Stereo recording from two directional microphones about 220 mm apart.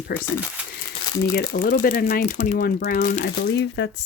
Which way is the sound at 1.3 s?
40° left (ahead or behind).